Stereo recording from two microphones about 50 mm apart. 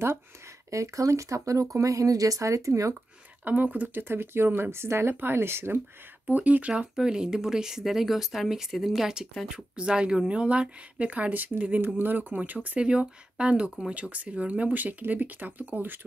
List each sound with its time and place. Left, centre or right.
0.7 s speech: right
3.4 s speech: right
4.1 s speech: right
6.2 s speech: right
6.7 s speech: centre
9.5 s speech: centre; by 12.4 s right
12.6 s speech: right